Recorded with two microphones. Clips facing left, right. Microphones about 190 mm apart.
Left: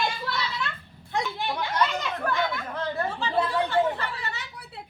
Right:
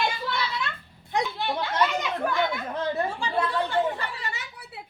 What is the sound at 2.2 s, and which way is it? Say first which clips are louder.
Speech: even; 5° right (ahead or behind).